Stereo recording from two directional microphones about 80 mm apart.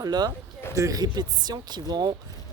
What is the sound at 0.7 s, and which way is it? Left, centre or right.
Speech, right.